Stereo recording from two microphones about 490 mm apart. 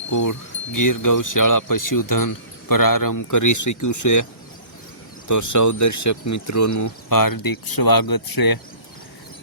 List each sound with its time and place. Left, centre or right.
0.1 s speech: left
5.3 s speech: left